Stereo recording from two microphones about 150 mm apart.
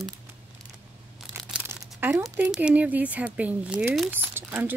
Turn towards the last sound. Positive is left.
turn(degrees=-15)  # may be behind; listen again after turning